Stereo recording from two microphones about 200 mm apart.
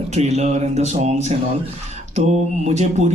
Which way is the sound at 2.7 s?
35° right (ahead or behind).